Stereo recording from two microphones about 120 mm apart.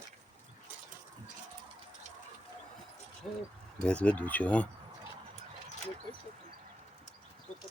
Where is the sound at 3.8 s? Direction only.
10° left (ahead or behind).